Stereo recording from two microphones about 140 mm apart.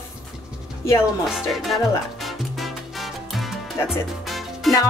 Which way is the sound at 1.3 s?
Centre (ahead or behind).